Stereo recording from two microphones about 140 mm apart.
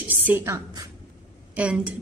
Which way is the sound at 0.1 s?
15° right (ahead or behind).